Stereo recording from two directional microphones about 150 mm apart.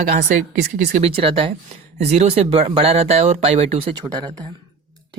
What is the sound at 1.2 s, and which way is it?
Speech, 40° right (ahead or behind).